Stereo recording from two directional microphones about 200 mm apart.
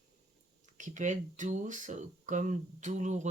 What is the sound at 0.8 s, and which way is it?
Speech, 40° right (ahead or behind).